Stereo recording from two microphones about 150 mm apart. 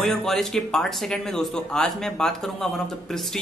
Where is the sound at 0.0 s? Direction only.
5° left (ahead or behind).